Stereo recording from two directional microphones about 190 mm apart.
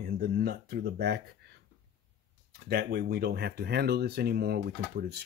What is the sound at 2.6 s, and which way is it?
Speech, 55° right (ahead or behind).